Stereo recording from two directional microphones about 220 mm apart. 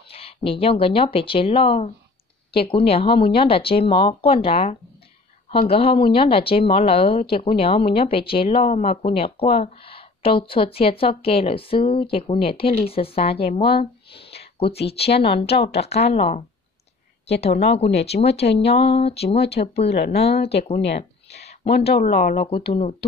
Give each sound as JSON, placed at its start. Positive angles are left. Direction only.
{"t": 0.1, "sound": "speech", "side_deg": 25}
{"t": 13.7, "sound": "a sound", "side_deg": 25}
{"t": 15.1, "sound": "speech", "side_deg": 25}
{"t": 18.1, "sound": "speech", "side_deg": 40}
{"t": 18.6, "sound": "speech", "side_deg": 25}
{"t": 21.8, "sound": "speech", "side_deg": 30}